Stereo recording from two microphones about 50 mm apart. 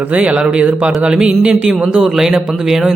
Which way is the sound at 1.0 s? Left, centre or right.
Centre.